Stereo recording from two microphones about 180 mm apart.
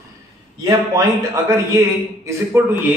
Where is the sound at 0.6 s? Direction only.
15° right (ahead or behind).